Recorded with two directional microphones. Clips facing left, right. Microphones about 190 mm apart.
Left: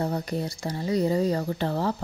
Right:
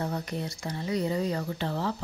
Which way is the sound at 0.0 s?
35° left (ahead or behind).